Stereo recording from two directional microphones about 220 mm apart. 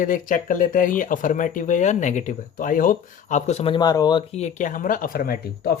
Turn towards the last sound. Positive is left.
turn(degrees=45)  # may be behind; listen again after turning